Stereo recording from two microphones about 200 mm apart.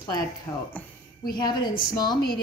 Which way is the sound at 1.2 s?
20° left (ahead or behind).